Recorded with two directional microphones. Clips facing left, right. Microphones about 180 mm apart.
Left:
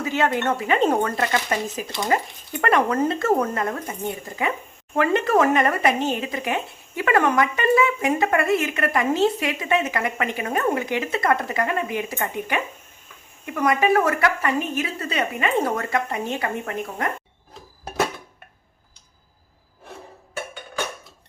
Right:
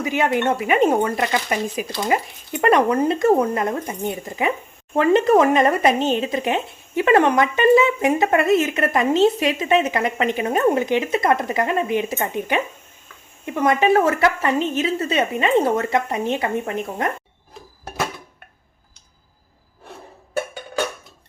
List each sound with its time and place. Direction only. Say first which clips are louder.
0.0 s speech: right 2 dB; 15° right (ahead or behind)